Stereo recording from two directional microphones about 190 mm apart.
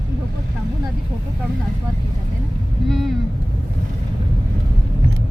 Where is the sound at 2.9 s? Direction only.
Centre (ahead or behind).